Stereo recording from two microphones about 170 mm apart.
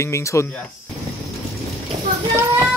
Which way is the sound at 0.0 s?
15° left (ahead or behind).